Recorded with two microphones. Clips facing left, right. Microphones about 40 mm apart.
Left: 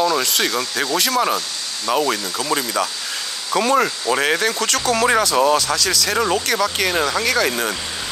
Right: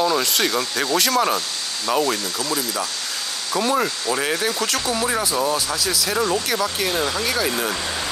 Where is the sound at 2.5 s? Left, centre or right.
Left.